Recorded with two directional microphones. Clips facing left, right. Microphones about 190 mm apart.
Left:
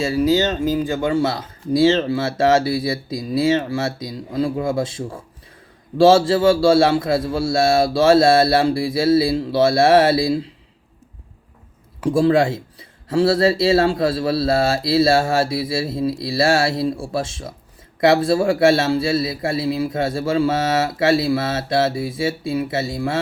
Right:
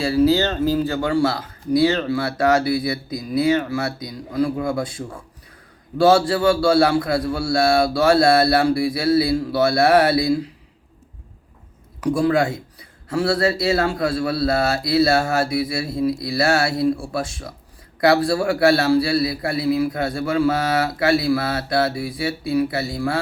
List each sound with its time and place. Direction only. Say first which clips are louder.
0.0 s a man's voice: even; 20° left (ahead or behind)
11.9 s a man's voice: left 3 dB; 30° left (ahead or behind)